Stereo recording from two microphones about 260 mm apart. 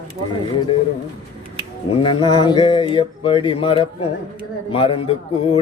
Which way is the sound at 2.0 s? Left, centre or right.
Centre.